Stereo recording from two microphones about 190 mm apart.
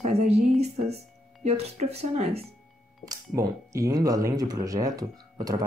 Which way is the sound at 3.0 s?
20° right (ahead or behind).